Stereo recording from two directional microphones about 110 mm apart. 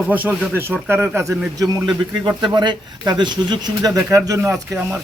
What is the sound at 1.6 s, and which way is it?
Speech, 30° right (ahead or behind).